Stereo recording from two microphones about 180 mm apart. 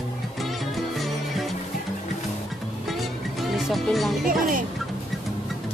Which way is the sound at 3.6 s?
Centre (ahead or behind).